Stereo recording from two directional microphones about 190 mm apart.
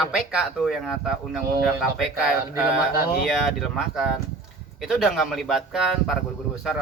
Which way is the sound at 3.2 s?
Centre (ahead or behind).